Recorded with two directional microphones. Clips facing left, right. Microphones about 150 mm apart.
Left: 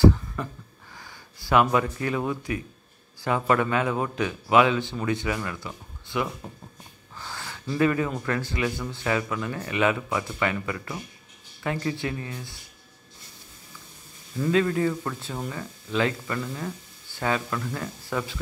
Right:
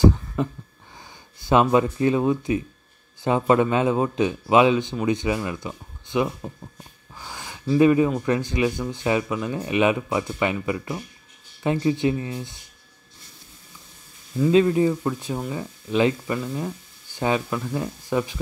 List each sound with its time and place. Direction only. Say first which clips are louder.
0.4 s speech: right 8 dB; 20° right (ahead or behind)
14.5 s speech: right 5 dB; 20° right (ahead or behind)